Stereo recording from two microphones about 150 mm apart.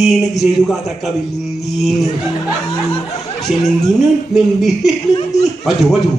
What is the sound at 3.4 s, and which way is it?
Speech, 45° left (ahead or behind).